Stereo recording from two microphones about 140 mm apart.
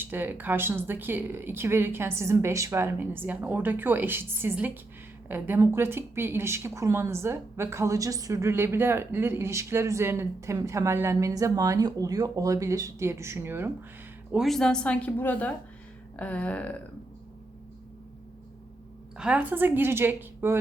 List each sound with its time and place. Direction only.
0.0 s speech: 15° right (ahead or behind)
14.3 s a woman's voice: centre (ahead or behind)
19.1 s speech: 5° right (ahead or behind)